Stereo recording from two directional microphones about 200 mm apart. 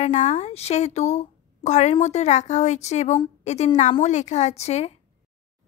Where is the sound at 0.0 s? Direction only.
35° left (ahead or behind).